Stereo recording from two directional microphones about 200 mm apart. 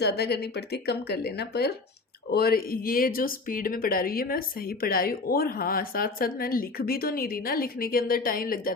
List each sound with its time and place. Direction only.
0.0 s speech: 55° left (ahead or behind)